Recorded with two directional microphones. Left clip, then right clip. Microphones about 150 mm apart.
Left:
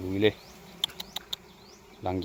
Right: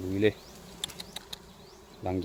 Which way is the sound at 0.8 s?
10° right (ahead or behind).